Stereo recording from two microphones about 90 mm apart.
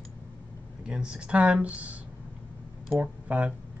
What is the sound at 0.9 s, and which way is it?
Speech, 10° right (ahead or behind).